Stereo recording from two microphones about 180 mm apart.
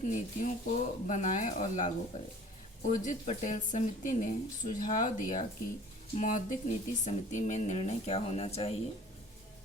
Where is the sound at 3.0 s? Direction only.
40° left (ahead or behind).